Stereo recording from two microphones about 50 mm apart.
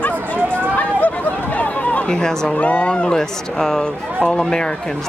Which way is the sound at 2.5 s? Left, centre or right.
Left.